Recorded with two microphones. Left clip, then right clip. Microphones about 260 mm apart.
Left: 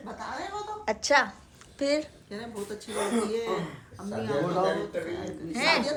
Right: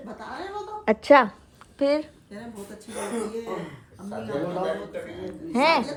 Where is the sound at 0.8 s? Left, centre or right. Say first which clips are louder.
Right 7 dB; right.